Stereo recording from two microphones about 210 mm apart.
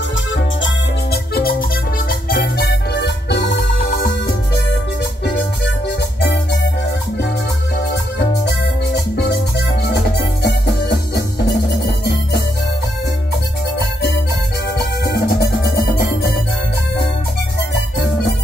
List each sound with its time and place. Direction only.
1.1 s music: 45° left (ahead or behind)
10.4 s music: 50° left (ahead or behind)
14.8 s music: 50° left (ahead or behind)